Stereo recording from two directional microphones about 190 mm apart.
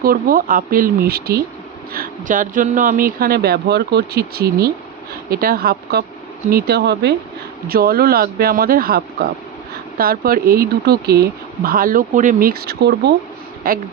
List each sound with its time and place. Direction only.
0.0 s speech: 50° right (ahead or behind)